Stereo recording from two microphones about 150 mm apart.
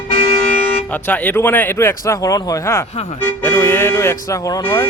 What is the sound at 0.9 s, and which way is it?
Speech, 10° left (ahead or behind).